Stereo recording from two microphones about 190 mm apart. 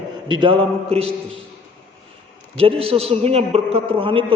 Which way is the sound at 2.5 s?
30° right (ahead or behind).